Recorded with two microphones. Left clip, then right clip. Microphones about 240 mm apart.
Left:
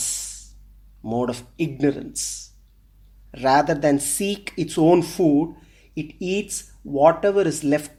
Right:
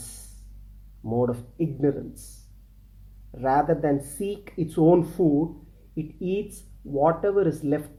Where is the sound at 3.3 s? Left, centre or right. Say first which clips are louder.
Left 4 dB; left.